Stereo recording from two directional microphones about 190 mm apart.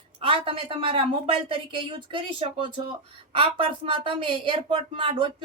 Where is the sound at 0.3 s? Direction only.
30° right (ahead or behind).